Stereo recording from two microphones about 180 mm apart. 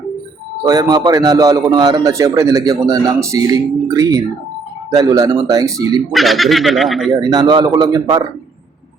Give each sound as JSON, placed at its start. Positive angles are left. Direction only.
{"t": 0.7, "sound": "a man's voice", "side_deg": -20}
{"t": 6.1, "sound": "speech", "side_deg": 0}
{"t": 7.2, "sound": "a man's voice", "side_deg": -20}